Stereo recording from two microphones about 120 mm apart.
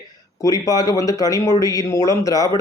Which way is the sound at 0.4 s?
30° left (ahead or behind).